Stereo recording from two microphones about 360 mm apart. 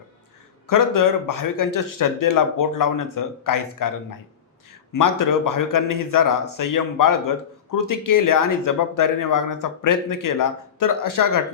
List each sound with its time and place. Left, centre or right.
0.7 s speech: left
4.9 s speech: left